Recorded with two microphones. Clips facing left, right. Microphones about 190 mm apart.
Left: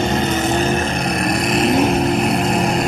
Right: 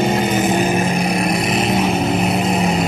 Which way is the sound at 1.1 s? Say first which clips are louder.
Right 1 dB; 5° right (ahead or behind).